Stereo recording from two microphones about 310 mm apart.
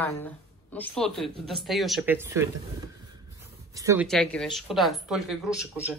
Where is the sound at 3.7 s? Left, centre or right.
Centre.